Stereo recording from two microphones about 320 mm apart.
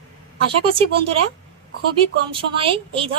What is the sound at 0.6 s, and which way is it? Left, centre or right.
Speech, centre.